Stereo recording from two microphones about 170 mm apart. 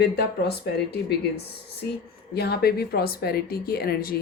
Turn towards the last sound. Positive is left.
turn(degrees=60)  # may be behind; listen again after turning